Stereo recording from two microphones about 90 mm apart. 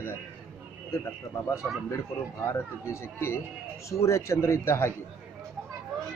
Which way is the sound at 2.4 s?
30° left (ahead or behind).